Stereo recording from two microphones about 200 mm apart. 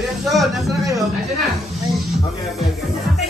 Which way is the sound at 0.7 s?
15° right (ahead or behind).